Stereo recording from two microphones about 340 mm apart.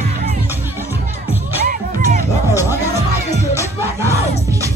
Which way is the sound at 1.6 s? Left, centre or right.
Right.